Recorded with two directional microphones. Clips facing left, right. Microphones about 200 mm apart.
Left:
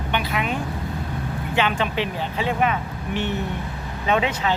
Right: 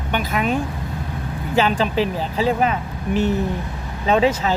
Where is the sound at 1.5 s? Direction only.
35° right (ahead or behind).